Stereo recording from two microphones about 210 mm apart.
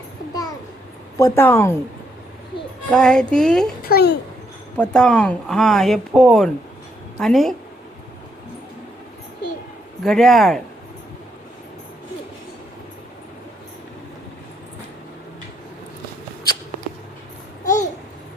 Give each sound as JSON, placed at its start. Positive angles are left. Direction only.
{"t": 1.2, "sound": "a woman's voice", "side_deg": 10}
{"t": 2.9, "sound": "speech", "side_deg": 5}
{"t": 3.8, "sound": "a child's voice", "side_deg": 50}
{"t": 4.8, "sound": "speech", "side_deg": 5}
{"t": 10.0, "sound": "speech", "side_deg": 0}